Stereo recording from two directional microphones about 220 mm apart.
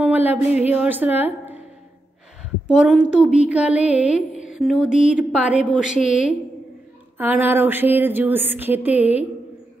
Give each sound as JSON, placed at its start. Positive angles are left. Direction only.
{"t": 0.3, "sound": "a woman's voice", "side_deg": -5}
{"t": 2.7, "sound": "music", "side_deg": -5}
{"t": 7.2, "sound": "a woman's voice", "side_deg": -10}